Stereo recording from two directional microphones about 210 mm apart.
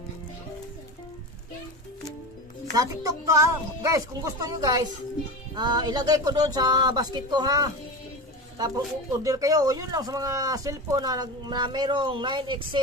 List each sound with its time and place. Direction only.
2.7 s speech: 15° right (ahead or behind)